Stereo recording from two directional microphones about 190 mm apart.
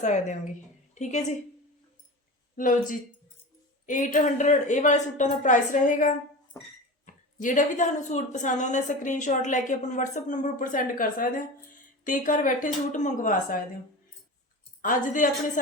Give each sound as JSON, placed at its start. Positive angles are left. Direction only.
{"t": 0.0, "sound": "a woman's voice", "side_deg": 40}
{"t": 2.6, "sound": "a woman's voice", "side_deg": 45}
{"t": 6.5, "sound": "a sound", "side_deg": 20}
{"t": 7.0, "sound": "a woman's voice", "side_deg": 40}
{"t": 14.8, "sound": "a woman's voice", "side_deg": 45}